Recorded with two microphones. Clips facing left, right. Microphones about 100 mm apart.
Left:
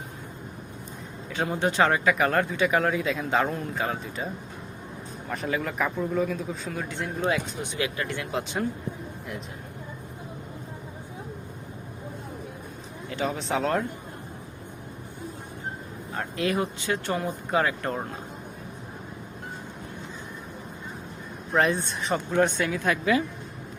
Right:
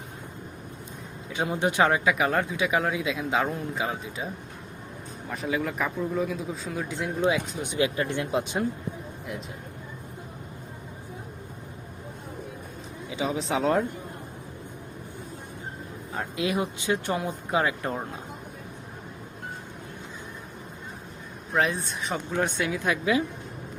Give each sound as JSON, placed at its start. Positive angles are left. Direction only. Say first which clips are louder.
{"t": 1.3, "sound": "speech", "louder": "even", "side_deg": -15}
{"t": 5.3, "sound": "speech", "louder": "even", "side_deg": -5}
{"t": 7.8, "sound": "speech", "louder": "right 5 dB", "side_deg": -20}
{"t": 13.1, "sound": "speech", "louder": "even", "side_deg": -5}
{"t": 16.4, "sound": "speech", "louder": "left 1 dB", "side_deg": -15}
{"t": 21.5, "sound": "speech", "louder": "left 2 dB", "side_deg": 0}